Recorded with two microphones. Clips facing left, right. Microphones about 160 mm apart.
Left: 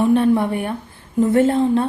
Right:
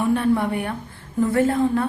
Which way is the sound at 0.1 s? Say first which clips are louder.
Left 4 dB; 20° left (ahead or behind).